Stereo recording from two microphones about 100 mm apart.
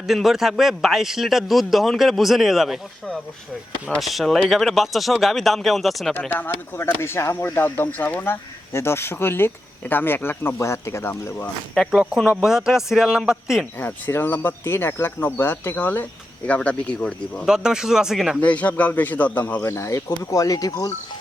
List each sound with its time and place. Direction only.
0.1 s a man's voice: 5° right (ahead or behind)
6.1 s speech: 20° left (ahead or behind)
11.9 s a man's voice: 5° right (ahead or behind)
13.7 s a man's voice: 20° left (ahead or behind)
17.4 s a man's voice: 5° right (ahead or behind)
18.3 s a man's voice: 15° left (ahead or behind)
19.7 s speech: 30° left (ahead or behind)